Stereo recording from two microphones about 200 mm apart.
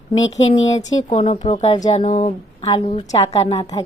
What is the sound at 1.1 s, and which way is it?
Speech, 30° left (ahead or behind).